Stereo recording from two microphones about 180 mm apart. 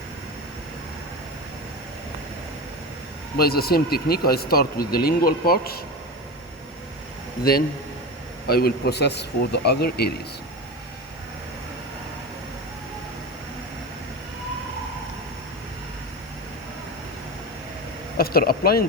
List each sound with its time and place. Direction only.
3.3 s speech: 60° left (ahead or behind)
8.4 s speech: 60° left (ahead or behind)
18.2 s speech: 55° left (ahead or behind)